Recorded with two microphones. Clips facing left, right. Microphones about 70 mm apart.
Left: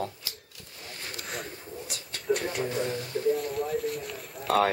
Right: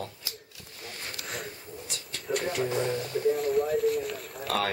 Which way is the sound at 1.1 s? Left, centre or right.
Centre.